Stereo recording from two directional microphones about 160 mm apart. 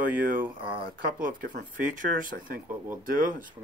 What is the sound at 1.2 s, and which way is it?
Speech, 60° right (ahead or behind).